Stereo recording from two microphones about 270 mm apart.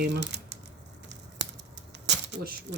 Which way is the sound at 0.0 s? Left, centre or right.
Right.